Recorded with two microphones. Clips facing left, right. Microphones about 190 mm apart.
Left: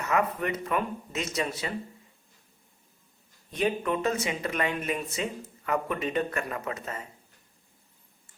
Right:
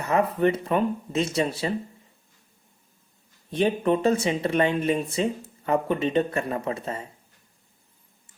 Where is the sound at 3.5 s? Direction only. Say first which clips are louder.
Right 5 dB; 30° right (ahead or behind).